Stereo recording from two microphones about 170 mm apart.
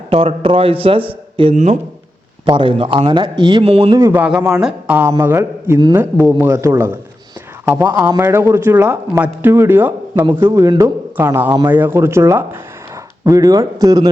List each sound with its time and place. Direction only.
0.1 s speech: 35° right (ahead or behind)
2.5 s speech: 30° right (ahead or behind)
3.9 s a man's voice: 15° right (ahead or behind)